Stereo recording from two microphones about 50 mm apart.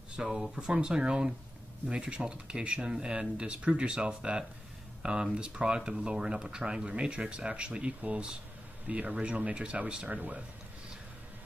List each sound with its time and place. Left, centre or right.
0.1 s speech: centre